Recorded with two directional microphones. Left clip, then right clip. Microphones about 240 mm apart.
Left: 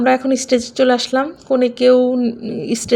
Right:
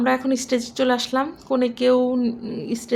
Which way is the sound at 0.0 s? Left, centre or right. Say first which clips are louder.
Left 6 dB; centre.